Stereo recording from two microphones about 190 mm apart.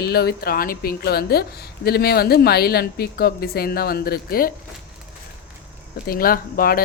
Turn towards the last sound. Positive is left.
turn(degrees=50)  # may be behind; listen again after turning